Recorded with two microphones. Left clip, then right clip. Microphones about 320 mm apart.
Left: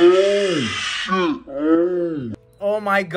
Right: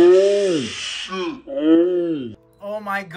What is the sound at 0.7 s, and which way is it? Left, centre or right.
Speech, centre.